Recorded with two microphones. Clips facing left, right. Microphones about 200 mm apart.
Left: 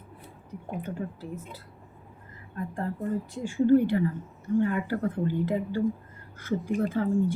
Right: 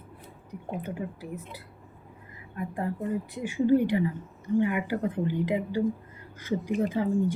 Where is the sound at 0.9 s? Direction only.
15° right (ahead or behind).